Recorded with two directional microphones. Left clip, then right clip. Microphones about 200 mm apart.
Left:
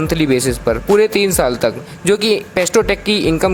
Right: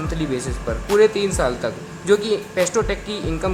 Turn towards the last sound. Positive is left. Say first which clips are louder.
# left 10 dB
turn(degrees=40)  # may be behind; listen again after turning